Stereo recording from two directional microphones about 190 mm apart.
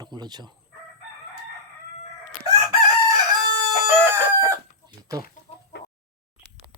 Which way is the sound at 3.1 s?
20° right (ahead or behind).